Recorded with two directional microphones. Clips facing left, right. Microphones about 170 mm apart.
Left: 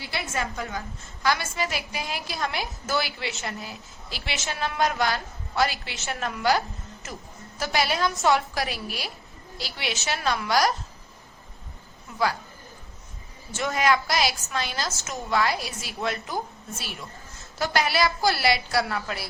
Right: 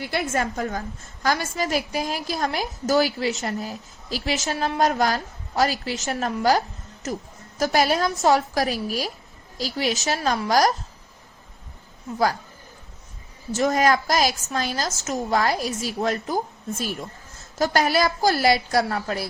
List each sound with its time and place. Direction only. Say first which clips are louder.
0.0 s a woman's voice: right 6 dB; 50° right (ahead or behind)
13.5 s a woman's voice: right 4 dB; 40° right (ahead or behind)